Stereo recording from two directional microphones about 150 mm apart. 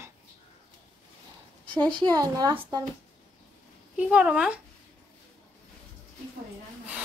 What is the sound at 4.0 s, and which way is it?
Speech, 10° right (ahead or behind).